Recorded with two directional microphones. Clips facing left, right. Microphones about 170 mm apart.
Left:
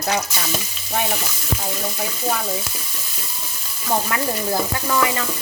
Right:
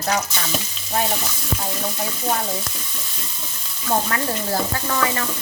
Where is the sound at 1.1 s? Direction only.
5° left (ahead or behind).